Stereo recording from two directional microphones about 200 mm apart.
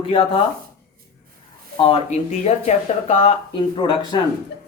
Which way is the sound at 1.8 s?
30° left (ahead or behind).